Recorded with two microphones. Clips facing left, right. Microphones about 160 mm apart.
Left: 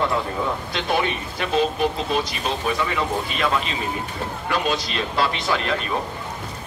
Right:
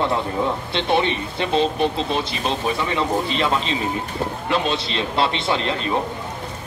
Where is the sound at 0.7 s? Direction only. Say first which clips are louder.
Right 4 dB; 25° right (ahead or behind).